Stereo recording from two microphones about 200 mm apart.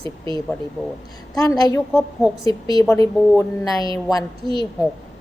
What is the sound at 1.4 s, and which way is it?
A woman's voice, 20° left (ahead or behind).